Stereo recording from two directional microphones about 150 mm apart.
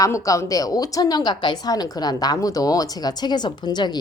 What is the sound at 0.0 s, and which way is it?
A woman's voice, 20° left (ahead or behind).